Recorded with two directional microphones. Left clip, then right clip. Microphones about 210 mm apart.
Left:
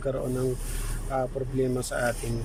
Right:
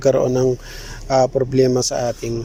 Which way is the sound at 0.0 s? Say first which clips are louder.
Right 14 dB; 35° right (ahead or behind).